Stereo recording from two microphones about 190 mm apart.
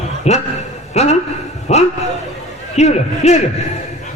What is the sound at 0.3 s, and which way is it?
A man's voice, 35° left (ahead or behind).